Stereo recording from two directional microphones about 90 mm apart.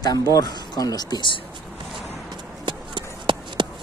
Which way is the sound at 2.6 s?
60° right (ahead or behind).